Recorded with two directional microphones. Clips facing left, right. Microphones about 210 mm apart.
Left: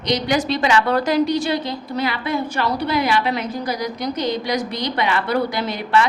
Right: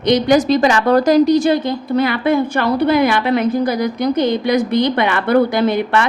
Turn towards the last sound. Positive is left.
turn(degrees=-55)  # may be behind; listen again after turning